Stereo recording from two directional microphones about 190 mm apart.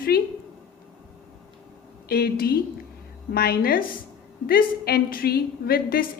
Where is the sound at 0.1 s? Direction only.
55° left (ahead or behind).